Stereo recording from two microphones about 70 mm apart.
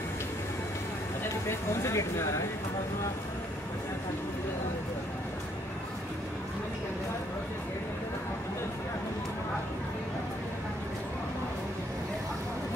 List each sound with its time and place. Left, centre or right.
1.5 s speech: left